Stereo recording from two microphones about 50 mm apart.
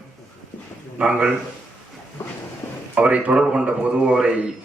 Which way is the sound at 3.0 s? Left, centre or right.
Right.